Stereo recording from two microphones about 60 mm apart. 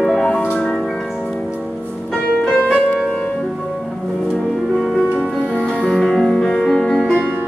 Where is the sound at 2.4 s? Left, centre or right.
Left.